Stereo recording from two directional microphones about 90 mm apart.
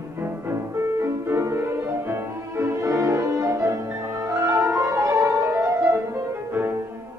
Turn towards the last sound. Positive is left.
turn(degrees=-25)  # may be behind; listen again after turning